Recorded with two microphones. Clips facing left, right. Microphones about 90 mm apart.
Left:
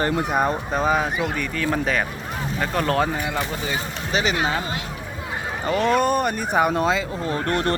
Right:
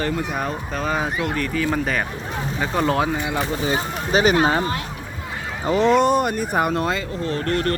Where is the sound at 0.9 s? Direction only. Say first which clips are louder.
Even; 5° left (ahead or behind).